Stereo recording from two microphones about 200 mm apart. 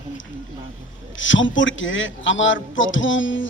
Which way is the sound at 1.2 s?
70° left (ahead or behind).